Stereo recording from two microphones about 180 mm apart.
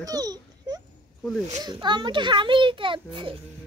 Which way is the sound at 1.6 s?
25° right (ahead or behind).